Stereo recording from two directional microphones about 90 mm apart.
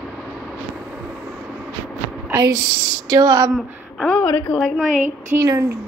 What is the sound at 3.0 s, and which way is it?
Speech, 45° right (ahead or behind).